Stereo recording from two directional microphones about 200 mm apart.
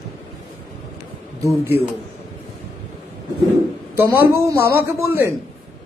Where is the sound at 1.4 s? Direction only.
10° right (ahead or behind).